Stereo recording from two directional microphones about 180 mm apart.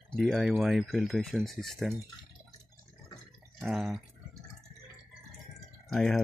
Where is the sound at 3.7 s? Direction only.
Centre (ahead or behind).